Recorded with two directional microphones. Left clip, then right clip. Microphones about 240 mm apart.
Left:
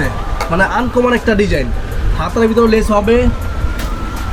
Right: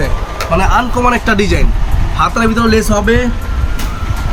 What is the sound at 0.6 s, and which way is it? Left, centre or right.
Speech, right.